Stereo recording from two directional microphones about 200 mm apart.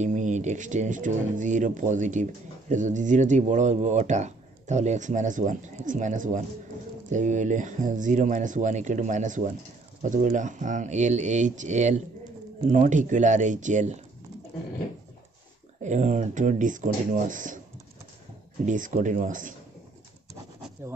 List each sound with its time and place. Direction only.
0.0 s speech: 35° right (ahead or behind)
15.8 s speech: 35° right (ahead or behind)
18.7 s speech: 40° right (ahead or behind)
20.8 s speech: 10° right (ahead or behind)